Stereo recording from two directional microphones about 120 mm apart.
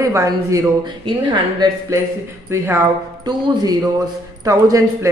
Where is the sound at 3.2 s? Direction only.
35° right (ahead or behind).